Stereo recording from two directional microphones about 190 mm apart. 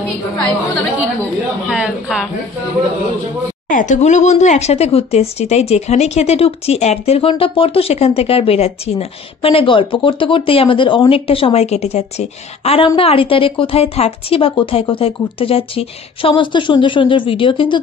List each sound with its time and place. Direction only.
1.7 s speech: centre (ahead or behind)
3.6 s a woman's voice: 40° left (ahead or behind); by 17.7 s 25° left (ahead or behind)